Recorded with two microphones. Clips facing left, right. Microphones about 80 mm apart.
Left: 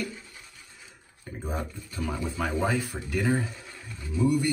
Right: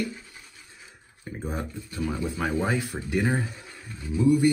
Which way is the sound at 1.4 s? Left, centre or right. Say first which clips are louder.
Right 1 dB; centre.